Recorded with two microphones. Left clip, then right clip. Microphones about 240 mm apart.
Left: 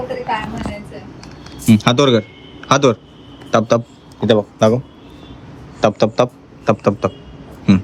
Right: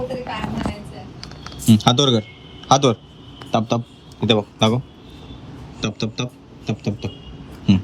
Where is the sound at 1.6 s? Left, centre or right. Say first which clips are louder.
Left 3 dB; centre.